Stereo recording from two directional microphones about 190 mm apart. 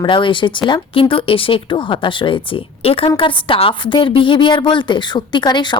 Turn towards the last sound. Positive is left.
turn(degrees=25)  # may be behind; listen again after turning